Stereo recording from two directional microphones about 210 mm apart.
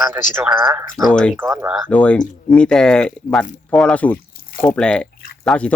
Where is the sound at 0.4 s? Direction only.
5° right (ahead or behind).